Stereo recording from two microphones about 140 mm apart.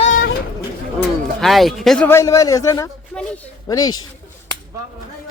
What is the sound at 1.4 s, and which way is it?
Speech, centre (ahead or behind).